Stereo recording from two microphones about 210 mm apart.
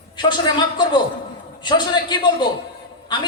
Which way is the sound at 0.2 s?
20° left (ahead or behind).